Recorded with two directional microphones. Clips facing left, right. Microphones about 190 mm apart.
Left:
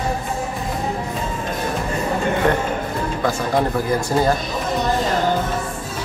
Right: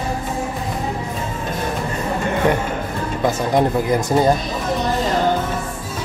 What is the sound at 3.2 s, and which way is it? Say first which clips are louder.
Speech: right 3 dB; 20° right (ahead or behind).